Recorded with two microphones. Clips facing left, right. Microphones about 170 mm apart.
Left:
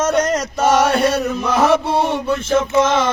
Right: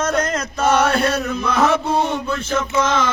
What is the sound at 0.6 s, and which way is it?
Chant, 10° left (ahead or behind).